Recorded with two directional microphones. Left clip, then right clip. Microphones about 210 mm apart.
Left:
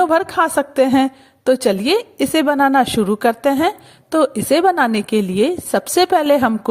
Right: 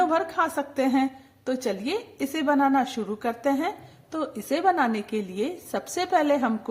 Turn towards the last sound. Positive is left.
turn(degrees=40)  # may be behind; listen again after turning